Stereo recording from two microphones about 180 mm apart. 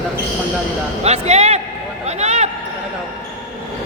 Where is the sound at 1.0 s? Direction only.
35° right (ahead or behind).